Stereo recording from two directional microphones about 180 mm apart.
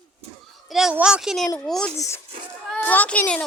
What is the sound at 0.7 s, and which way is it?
A woman's voice, 5° right (ahead or behind).